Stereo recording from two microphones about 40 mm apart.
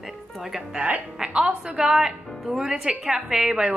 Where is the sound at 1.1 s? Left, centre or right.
Centre.